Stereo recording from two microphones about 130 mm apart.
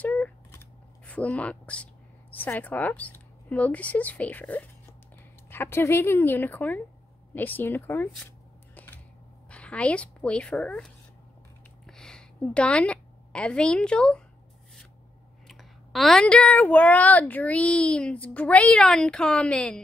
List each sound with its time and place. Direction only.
0.0 s a sound: 10° left (ahead or behind)
0.5 s shuffling cards: 15° left (ahead or behind)
2.3 s speech: 15° left (ahead or behind)
8.7 s scissors: 15° left (ahead or behind)
9.5 s speech: 10° left (ahead or behind)
11.8 s a sound: 5° left (ahead or behind)
15.4 s speech: centre (ahead or behind)